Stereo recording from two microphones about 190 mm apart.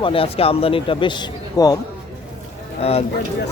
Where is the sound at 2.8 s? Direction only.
30° left (ahead or behind).